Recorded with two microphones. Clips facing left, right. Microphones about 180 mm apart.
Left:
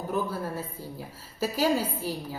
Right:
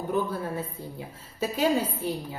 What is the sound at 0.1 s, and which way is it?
Speech, centre (ahead or behind).